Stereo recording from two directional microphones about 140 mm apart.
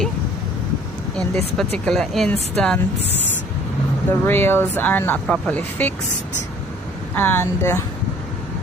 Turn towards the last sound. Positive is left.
turn(degrees=20)  # may be behind; listen again after turning